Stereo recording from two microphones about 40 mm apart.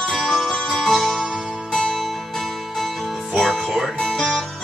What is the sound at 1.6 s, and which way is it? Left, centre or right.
Music, centre.